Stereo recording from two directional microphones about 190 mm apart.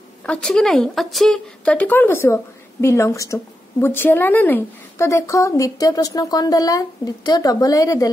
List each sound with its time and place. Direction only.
0.2 s a woman's voice: 5° left (ahead or behind)